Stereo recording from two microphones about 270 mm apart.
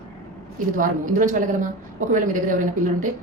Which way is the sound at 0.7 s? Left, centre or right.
Right.